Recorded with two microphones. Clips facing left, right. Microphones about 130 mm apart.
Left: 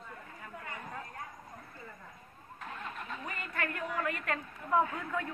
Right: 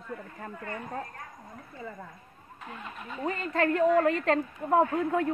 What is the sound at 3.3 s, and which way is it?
A woman's voice, 30° right (ahead or behind).